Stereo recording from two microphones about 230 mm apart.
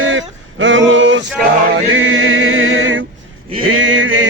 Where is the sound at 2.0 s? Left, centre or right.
Right.